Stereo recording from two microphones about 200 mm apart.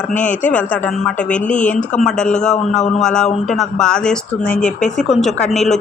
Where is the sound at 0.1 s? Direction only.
40° left (ahead or behind).